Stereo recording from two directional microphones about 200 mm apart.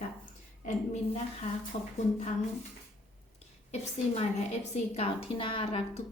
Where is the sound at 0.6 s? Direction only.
35° left (ahead or behind).